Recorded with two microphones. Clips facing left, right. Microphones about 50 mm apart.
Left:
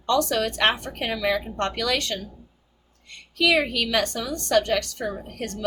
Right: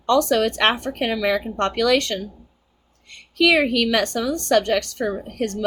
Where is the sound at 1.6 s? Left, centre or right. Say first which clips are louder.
Right 6 dB; right.